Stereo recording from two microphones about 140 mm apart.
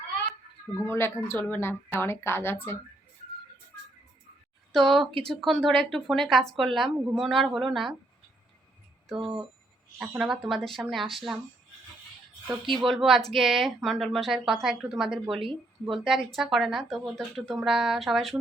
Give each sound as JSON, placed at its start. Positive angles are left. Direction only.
{"t": 0.9, "sound": "a woman's voice", "side_deg": 20}
{"t": 4.7, "sound": "a woman's voice", "side_deg": 0}
{"t": 9.0, "sound": "speech", "side_deg": 0}
{"t": 12.9, "sound": "speech", "side_deg": 0}